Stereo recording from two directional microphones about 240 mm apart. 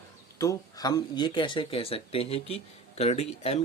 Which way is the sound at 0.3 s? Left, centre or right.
Centre.